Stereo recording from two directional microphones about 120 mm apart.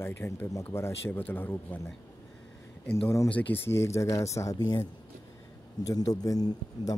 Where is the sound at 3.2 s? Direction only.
15° left (ahead or behind); by 6.9 s 30° left (ahead or behind).